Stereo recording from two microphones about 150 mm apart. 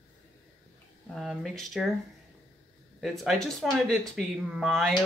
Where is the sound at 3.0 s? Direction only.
Centre (ahead or behind).